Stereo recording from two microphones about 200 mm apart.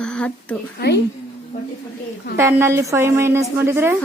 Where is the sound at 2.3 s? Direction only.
10° right (ahead or behind).